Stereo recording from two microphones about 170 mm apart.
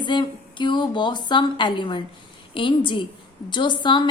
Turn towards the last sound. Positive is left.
turn(degrees=25)  # may be behind; listen again after turning